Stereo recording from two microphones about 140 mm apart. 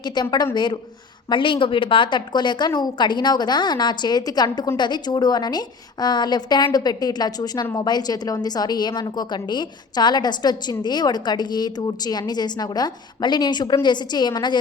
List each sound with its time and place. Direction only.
0.0 s a woman's voice: 30° left (ahead or behind)